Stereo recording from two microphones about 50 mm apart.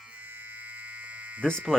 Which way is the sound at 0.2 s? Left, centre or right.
Right.